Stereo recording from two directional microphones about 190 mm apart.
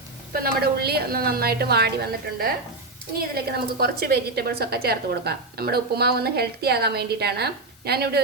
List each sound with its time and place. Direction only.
0.3 s a woman's voice: 55° right (ahead or behind)